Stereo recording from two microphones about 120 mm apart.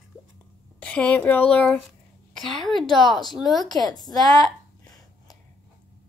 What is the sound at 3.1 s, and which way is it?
Speech, centre (ahead or behind).